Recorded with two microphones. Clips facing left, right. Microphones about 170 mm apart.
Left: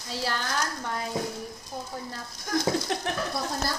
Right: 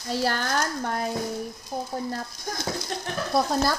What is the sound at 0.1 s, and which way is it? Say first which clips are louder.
Speech: right 5 dB; 50° right (ahead or behind).